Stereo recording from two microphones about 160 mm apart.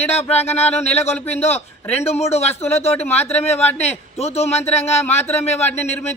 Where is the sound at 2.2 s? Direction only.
40° left (ahead or behind).